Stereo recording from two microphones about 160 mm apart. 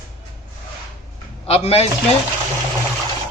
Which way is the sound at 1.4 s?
35° left (ahead or behind).